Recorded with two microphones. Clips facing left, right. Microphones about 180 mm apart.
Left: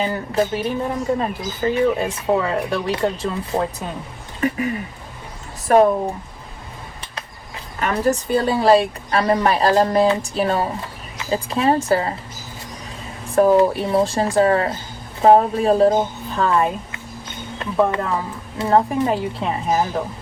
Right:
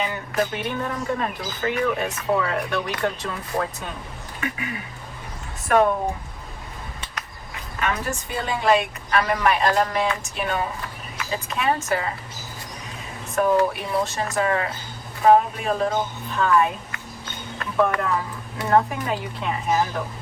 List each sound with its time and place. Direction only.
0.0 s a woman's voice: 30° left (ahead or behind)
4.4 s speech: 35° left (ahead or behind)
7.2 s speech: 35° left (ahead or behind)
13.3 s a woman's voice: 30° left (ahead or behind)